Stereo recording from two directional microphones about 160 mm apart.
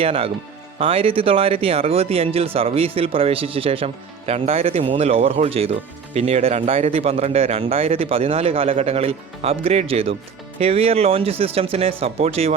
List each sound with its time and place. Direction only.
0.0 s speech: 35° right (ahead or behind)